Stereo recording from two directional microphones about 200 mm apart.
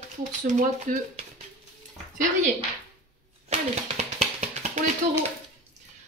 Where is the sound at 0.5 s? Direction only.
40° right (ahead or behind).